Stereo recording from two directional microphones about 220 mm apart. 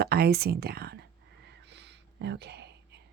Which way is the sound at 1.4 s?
50° right (ahead or behind).